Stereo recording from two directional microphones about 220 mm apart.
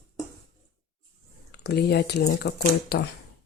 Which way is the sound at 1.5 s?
50° left (ahead or behind).